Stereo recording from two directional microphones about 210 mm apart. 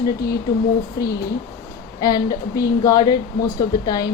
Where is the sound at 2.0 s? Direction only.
20° left (ahead or behind).